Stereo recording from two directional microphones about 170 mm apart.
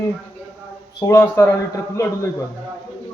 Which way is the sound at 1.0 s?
15° left (ahead or behind).